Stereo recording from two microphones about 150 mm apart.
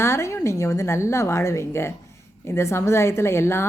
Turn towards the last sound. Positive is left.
turn(degrees=15)  # may be behind; listen again after turning